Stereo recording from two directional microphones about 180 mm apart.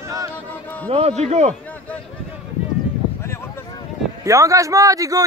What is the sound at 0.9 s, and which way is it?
Speech, 35° right (ahead or behind).